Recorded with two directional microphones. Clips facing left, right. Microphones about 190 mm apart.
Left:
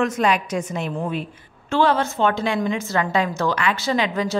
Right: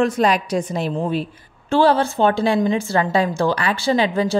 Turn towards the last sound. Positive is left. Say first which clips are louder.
# right 4 dB
turn(degrees=-30)  # may be behind; listen again after turning